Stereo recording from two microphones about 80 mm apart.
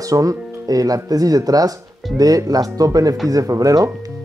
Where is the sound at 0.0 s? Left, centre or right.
Right.